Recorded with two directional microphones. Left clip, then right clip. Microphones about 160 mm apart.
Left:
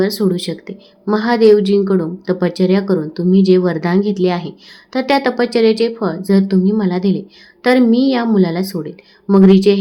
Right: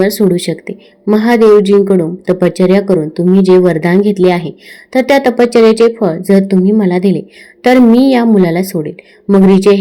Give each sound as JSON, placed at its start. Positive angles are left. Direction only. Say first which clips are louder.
{"t": 0.0, "sound": "a woman's voice", "louder": "right 6 dB", "side_deg": -25}